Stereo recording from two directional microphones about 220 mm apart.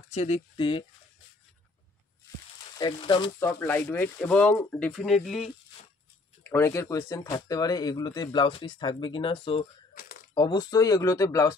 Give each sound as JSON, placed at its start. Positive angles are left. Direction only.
{"t": 0.1, "sound": "speech", "side_deg": 30}
{"t": 2.8, "sound": "speech", "side_deg": 20}
{"t": 3.4, "sound": "speech", "side_deg": 10}
{"t": 6.5, "sound": "speech", "side_deg": 10}
{"t": 10.0, "sound": "a sound", "side_deg": 40}
{"t": 10.3, "sound": "speech", "side_deg": 20}